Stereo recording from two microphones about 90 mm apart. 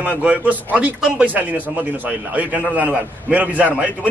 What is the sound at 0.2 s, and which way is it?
A man's voice, 15° right (ahead or behind).